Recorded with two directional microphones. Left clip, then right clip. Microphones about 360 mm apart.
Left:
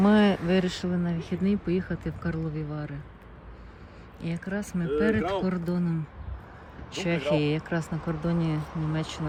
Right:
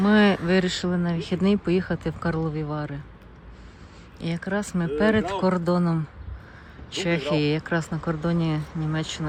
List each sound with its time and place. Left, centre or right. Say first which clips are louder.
0.0 s speech: right 3 dB; centre
4.2 s speech: right 6 dB; centre